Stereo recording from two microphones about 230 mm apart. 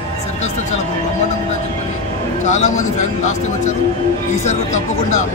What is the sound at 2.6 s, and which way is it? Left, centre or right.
Speech, left.